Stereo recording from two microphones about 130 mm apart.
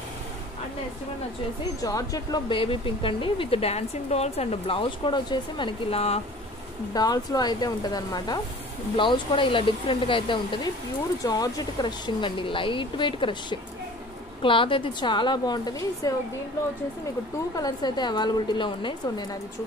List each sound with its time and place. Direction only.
1.8 s speech: 25° left (ahead or behind)
2.5 s speech: 40° left (ahead or behind)
6.9 s speech: 30° left (ahead or behind)
17.6 s speech: 30° left (ahead or behind)